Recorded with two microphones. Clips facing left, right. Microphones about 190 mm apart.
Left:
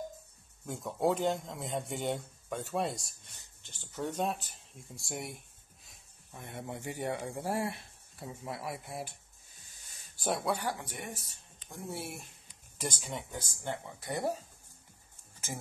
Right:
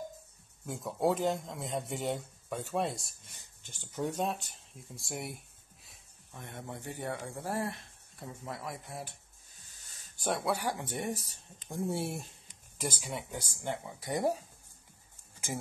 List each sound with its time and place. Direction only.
0.7 s speech: centre (ahead or behind)
3.6 s speech: 15° right (ahead or behind)
4.1 s speech: centre (ahead or behind)
9.7 s a sound: 15° left (ahead or behind)
10.2 s speech: centre (ahead or behind)
10.6 s speech: 15° right (ahead or behind)
10.9 s speech: 35° right (ahead or behind)
12.7 s speech: centre (ahead or behind)